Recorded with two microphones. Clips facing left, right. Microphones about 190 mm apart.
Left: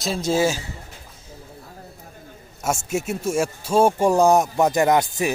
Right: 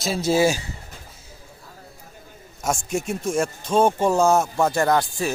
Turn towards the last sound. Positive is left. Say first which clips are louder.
# left 2 dB
turn(degrees=20)  # may be behind; listen again after turning